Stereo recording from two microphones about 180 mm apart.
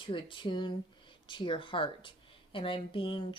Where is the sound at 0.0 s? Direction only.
30° left (ahead or behind).